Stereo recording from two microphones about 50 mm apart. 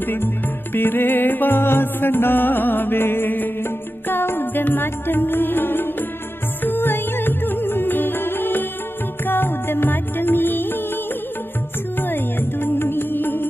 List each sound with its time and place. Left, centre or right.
0.0 s music: left
12.0 s music: left